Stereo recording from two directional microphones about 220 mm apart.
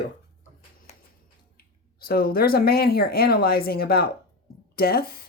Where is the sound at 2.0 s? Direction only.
45° left (ahead or behind).